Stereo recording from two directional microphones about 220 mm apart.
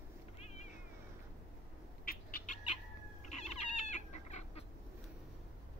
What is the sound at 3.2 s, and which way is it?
Cat, 30° left (ahead or behind).